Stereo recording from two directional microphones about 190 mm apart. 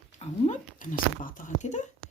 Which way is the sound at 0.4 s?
40° left (ahead or behind).